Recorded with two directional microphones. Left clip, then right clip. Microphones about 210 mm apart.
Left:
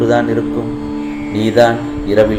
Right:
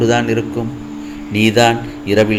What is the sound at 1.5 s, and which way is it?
Speech, 50° right (ahead or behind).